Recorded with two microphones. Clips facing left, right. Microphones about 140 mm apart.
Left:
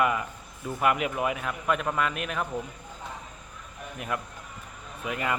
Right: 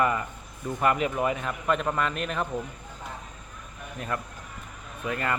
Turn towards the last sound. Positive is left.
turn(degrees=10)  # may be behind; listen again after turning